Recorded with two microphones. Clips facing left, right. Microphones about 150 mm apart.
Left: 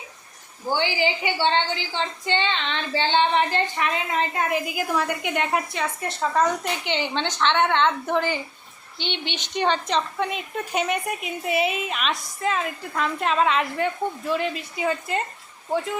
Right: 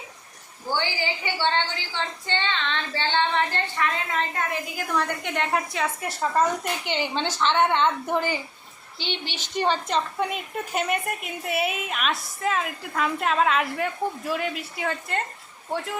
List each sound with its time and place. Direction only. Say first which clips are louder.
0.7 s a woman's voice: left 4 dB; 15° left (ahead or behind); by 8.2 s 10° right (ahead or behind)
9.3 s a woman's voice: left 1 dB; 5° right (ahead or behind)